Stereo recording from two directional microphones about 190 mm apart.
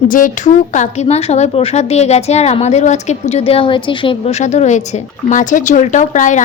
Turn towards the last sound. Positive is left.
turn(degrees=40)  # may be behind; listen again after turning